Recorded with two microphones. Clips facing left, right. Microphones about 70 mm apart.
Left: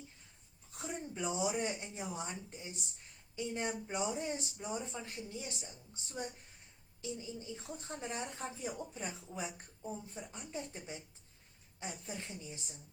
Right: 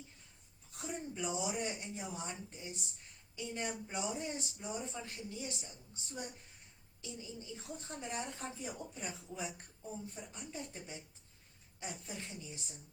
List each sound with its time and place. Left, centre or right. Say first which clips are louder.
0.7 s a woman's voice: even; left